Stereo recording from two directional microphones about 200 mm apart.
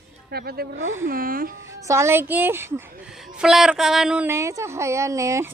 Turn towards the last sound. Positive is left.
turn(degrees=-15)  # may be behind; listen again after turning